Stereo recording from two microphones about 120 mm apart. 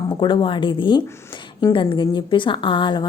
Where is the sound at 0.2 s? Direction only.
40° left (ahead or behind).